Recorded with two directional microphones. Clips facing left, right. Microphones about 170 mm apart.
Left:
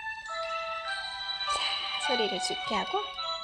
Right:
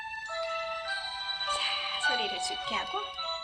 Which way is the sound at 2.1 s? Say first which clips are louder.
Left 6 dB; 10° right (ahead or behind).